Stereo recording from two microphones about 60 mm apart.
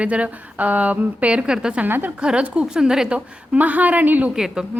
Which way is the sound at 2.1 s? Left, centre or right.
Centre.